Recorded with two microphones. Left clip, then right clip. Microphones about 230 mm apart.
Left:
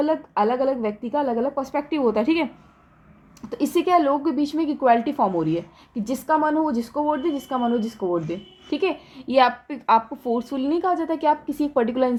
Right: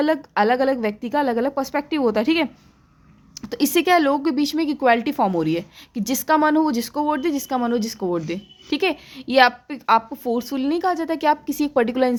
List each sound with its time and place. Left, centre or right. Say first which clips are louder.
0.0 s a woman's voice: right 2 dB; right
3.5 s a woman's voice: right 2 dB; right